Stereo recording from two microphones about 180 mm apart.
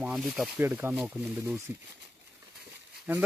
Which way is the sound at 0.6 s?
15° right (ahead or behind).